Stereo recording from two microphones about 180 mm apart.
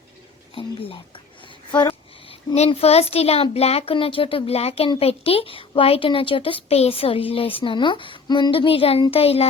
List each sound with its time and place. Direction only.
0.5 s speech: 30° left (ahead or behind)
2.6 s a child's voice: 35° left (ahead or behind)